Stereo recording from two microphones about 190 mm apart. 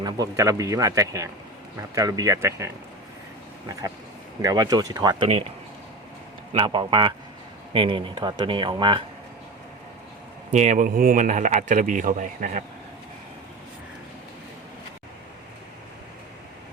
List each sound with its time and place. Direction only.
0.0 s speech: 15° right (ahead or behind)
3.7 s speech: 15° right (ahead or behind)
6.5 s speech: 25° right (ahead or behind)
10.5 s speech: 40° right (ahead or behind)